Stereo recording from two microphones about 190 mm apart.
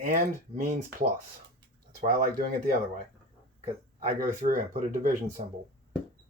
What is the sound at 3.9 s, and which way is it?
Speech, 45° right (ahead or behind).